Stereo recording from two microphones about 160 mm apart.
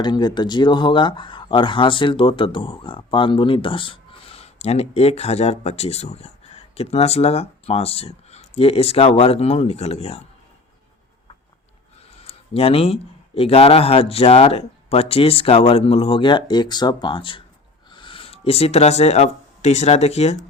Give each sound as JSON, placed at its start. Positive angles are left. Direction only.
{"t": 0.0, "sound": "speech", "side_deg": 25}
{"t": 12.2, "sound": "speech", "side_deg": 40}